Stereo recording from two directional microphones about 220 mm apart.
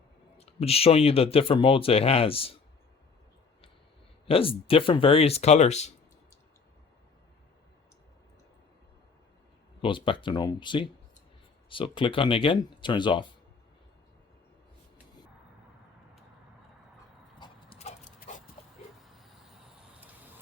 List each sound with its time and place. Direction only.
0.3 s speech: 25° left (ahead or behind)
4.3 s speech: 25° left (ahead or behind)
9.8 s speech: 20° left (ahead or behind)
17.4 s dog: 25° left (ahead or behind)